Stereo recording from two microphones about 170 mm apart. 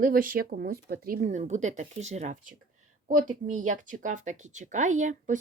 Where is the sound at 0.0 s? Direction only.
55° right (ahead or behind).